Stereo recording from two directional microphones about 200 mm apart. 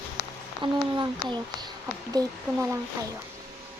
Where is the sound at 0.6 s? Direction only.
20° right (ahead or behind).